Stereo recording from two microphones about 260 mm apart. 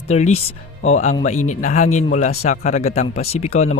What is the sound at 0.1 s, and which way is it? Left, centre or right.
A man's voice, left.